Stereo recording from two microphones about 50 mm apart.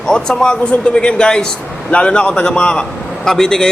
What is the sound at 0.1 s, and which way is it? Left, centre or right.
A man's voice, centre.